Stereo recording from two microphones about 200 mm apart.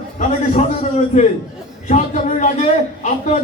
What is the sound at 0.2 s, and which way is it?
A man's voice, 35° left (ahead or behind).